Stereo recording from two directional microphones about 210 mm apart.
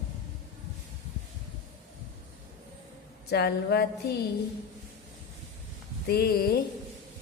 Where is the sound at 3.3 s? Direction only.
50° left (ahead or behind).